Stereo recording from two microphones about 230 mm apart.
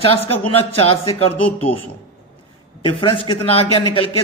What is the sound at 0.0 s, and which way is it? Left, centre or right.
Speech, left.